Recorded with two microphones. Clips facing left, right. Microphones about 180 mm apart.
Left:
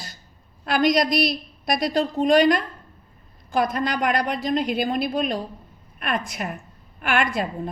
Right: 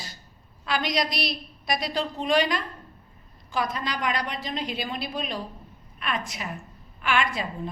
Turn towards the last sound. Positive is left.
turn(degrees=50)  # may be behind; listen again after turning